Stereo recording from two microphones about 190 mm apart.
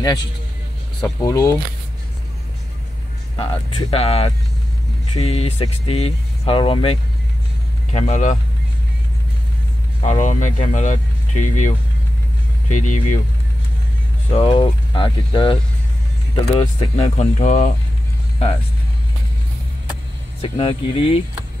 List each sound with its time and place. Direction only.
1.0 s speech: 15° left (ahead or behind)
3.3 s speech: 30° left (ahead or behind)
10.0 s speech: 40° left (ahead or behind)
14.3 s speech: 30° left (ahead or behind)
20.4 s speech: 30° left (ahead or behind)